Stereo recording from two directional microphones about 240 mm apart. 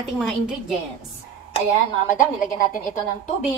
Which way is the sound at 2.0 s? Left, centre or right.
Left.